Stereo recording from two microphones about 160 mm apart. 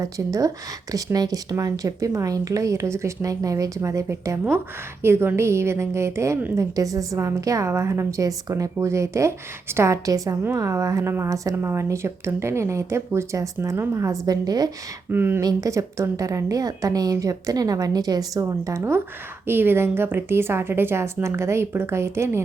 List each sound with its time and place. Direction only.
0.0 s a woman's voice: 20° right (ahead or behind)